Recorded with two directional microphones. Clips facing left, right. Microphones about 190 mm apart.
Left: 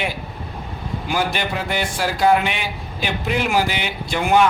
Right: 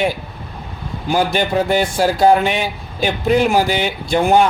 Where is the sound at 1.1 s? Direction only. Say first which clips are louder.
Right 7 dB; 40° right (ahead or behind).